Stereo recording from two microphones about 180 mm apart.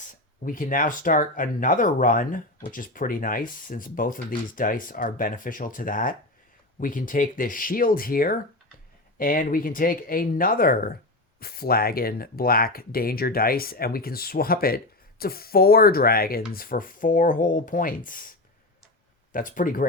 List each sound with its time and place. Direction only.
0.4 s speech: 50° left (ahead or behind)